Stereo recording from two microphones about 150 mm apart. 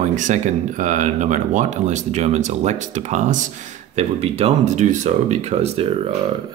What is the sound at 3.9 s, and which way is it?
Speech, 45° right (ahead or behind).